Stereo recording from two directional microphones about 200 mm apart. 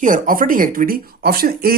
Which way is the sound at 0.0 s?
40° right (ahead or behind).